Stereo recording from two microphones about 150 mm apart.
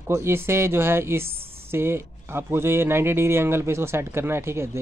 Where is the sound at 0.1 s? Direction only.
15° right (ahead or behind).